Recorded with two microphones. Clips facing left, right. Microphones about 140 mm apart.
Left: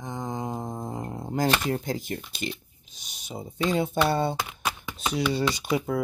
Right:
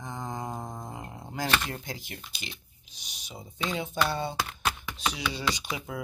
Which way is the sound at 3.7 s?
50° left (ahead or behind).